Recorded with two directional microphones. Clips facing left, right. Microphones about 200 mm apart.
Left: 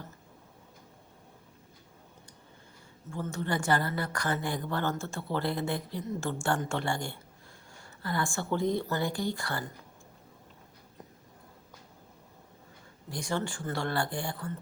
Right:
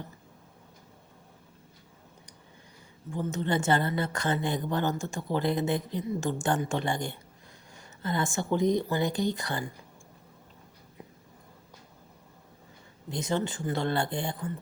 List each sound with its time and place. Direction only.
3.1 s a woman's voice: 20° right (ahead or behind)
13.1 s a woman's voice: 20° right (ahead or behind)